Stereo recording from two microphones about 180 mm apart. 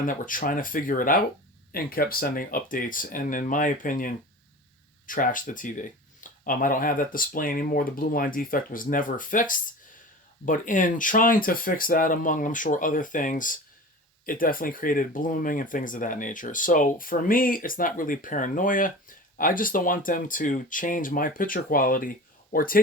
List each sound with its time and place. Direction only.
0.0 s speech: 50° left (ahead or behind)